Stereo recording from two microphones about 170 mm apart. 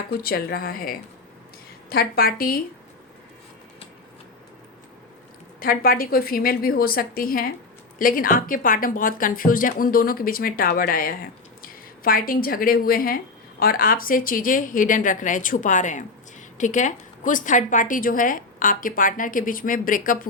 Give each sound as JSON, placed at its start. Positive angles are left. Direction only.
{"t": 0.2, "sound": "a woman's voice", "side_deg": 65}
{"t": 5.5, "sound": "a woman's voice", "side_deg": 60}